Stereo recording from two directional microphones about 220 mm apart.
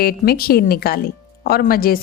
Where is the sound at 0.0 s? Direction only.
45° left (ahead or behind).